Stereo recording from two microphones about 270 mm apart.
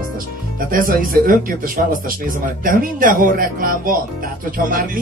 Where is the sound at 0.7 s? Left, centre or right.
Right.